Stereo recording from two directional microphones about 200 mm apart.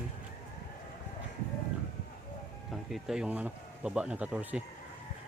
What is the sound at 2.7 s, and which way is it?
Speech, centre (ahead or behind).